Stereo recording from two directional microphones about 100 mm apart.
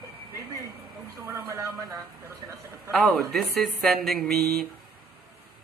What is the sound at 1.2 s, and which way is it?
Vehicle, 35° right (ahead or behind).